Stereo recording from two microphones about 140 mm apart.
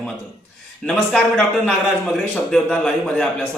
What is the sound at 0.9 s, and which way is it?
Speech, 5° left (ahead or behind).